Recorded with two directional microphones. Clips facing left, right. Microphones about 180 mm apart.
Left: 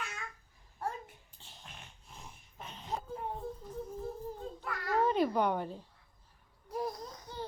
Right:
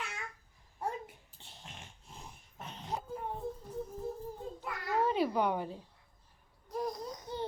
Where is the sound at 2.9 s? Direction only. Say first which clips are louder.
Even; centre (ahead or behind).